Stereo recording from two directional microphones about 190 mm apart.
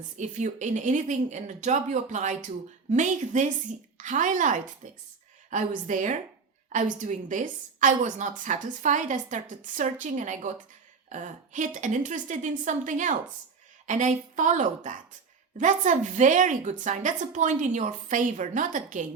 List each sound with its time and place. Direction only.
0.2 s a woman's voice: 40° right (ahead or behind)